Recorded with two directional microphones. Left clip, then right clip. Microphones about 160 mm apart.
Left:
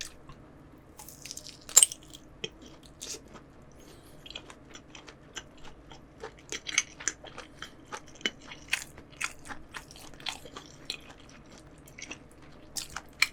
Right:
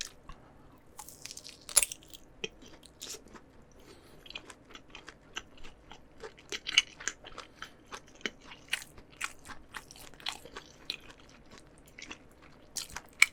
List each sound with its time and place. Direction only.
0.9 s chewing: 45° right (ahead or behind)
4.3 s biting: 35° right (ahead or behind)
5.9 s chewing: 35° right (ahead or behind)
8.2 s biting: 15° right (ahead or behind)
11.9 s drip: 25° right (ahead or behind)
12.7 s biting: 30° right (ahead or behind)